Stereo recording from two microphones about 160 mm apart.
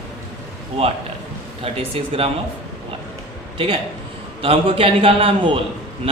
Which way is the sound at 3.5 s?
30° right (ahead or behind).